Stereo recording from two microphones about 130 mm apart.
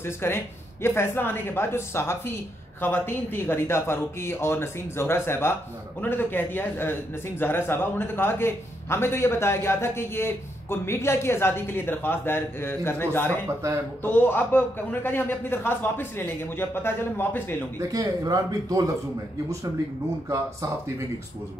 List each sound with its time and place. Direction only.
0.0 s a man's voice: 20° left (ahead or behind)
17.7 s speech: 25° right (ahead or behind)